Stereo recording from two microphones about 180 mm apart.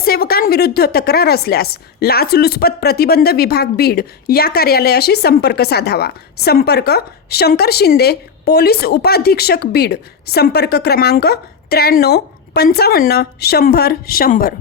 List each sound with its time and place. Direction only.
0.0 s a woman's voice: 60° left (ahead or behind)